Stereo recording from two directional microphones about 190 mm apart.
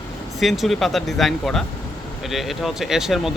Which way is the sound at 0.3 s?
Centre (ahead or behind).